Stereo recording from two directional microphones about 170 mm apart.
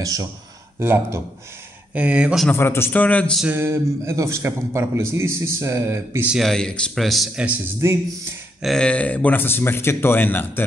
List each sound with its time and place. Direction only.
0.0 s a man's voice: 20° right (ahead or behind)
2.5 s speech: 15° left (ahead or behind)
3.4 s a man's voice: 15° right (ahead or behind)
6.3 s a man's voice: centre (ahead or behind); by 8.4 s 15° right (ahead or behind)
8.6 s speech: 5° left (ahead or behind)